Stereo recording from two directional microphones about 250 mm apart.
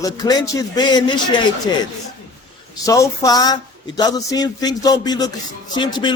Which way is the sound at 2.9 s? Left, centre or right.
Centre.